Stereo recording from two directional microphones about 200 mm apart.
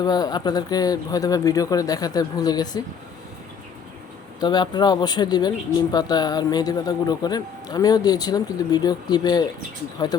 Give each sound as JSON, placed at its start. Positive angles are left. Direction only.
{"t": 0.0, "sound": "speech", "side_deg": 20}
{"t": 4.4, "sound": "speech", "side_deg": 20}